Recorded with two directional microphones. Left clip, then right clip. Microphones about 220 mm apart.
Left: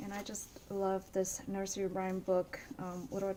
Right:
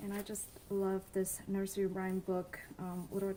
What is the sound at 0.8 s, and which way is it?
Speech, 35° left (ahead or behind).